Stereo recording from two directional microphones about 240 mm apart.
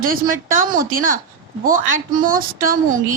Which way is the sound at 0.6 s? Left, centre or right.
Right.